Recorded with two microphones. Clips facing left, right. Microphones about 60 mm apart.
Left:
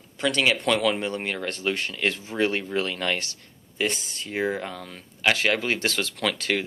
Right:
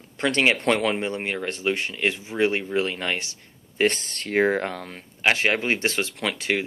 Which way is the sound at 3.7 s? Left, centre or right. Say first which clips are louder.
Right 5 dB; right.